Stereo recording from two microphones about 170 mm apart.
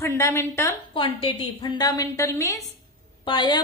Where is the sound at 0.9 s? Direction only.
30° left (ahead or behind).